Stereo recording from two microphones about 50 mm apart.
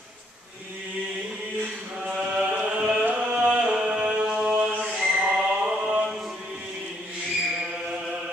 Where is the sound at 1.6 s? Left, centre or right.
Right.